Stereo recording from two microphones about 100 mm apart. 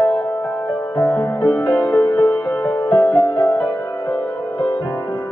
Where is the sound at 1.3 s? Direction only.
20° left (ahead or behind).